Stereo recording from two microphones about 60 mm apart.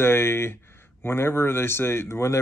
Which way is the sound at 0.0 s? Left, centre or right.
Left.